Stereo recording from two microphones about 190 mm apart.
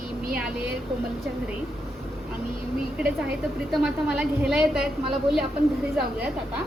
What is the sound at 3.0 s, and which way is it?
A woman's voice, 5° right (ahead or behind).